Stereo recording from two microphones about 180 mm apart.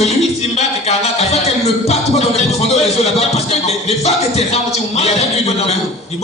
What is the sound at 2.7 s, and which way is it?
Speech, 35° left (ahead or behind).